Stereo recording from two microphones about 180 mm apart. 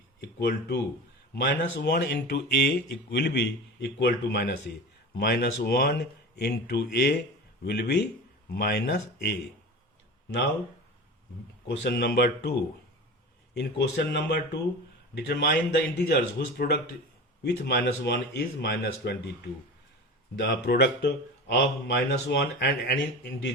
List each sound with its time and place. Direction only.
0.2 s speech: 65° left (ahead or behind)
11.8 s speech: 65° left (ahead or behind)
20.3 s speech: 70° left (ahead or behind)